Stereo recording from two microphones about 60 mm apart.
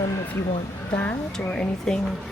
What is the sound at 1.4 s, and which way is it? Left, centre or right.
Speech, centre.